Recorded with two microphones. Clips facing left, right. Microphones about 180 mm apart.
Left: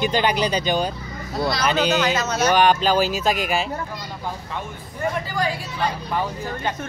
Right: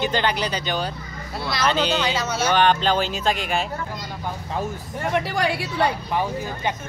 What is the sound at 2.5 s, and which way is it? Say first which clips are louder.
Speech: left 1 dB; 10° left (ahead or behind).